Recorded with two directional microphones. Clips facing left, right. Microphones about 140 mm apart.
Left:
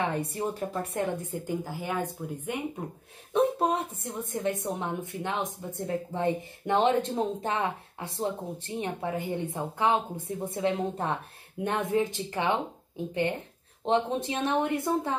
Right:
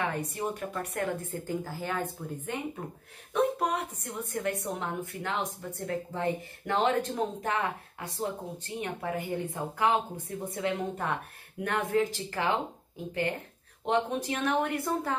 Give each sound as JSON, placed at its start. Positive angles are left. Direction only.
{"t": 0.0, "sound": "a woman's voice", "side_deg": 30}
{"t": 3.3, "sound": "a woman's voice", "side_deg": 25}
{"t": 13.8, "sound": "a woman's voice", "side_deg": 25}